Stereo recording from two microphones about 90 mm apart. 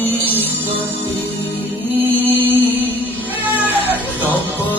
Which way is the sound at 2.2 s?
20° right (ahead or behind).